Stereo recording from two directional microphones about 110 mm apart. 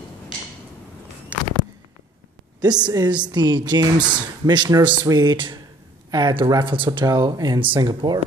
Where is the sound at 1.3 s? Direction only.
15° right (ahead or behind).